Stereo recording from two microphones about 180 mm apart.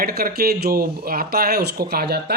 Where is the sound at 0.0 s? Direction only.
60° right (ahead or behind).